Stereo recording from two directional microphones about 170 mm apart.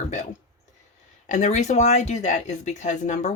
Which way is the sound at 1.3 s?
45° left (ahead or behind).